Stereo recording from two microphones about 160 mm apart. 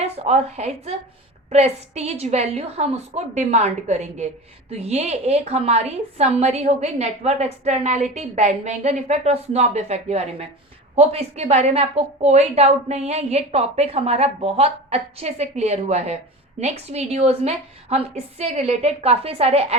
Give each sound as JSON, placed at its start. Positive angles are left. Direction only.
{"t": 0.0, "sound": "a woman's voice", "side_deg": -40}